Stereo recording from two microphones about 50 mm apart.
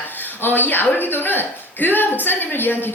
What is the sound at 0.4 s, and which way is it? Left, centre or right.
Speech, left.